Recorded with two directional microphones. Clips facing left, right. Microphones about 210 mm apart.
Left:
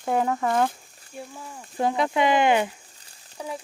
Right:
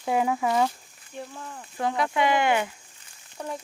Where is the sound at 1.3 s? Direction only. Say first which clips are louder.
Right 1 dB; 10° left (ahead or behind).